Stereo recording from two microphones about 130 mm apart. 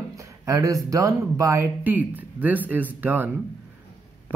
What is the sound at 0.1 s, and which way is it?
Speech, 25° right (ahead or behind).